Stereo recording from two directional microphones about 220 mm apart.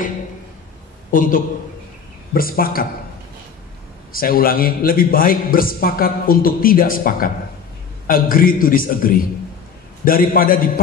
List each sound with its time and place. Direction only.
1.1 s a man's voice: 40° left (ahead or behind)
4.1 s a man's voice: 40° left (ahead or behind)